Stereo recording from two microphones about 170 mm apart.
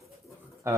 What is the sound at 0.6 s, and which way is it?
Speech, 15° right (ahead or behind).